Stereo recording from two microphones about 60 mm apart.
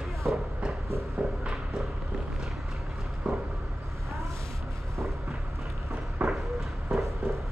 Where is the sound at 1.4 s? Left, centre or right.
Centre.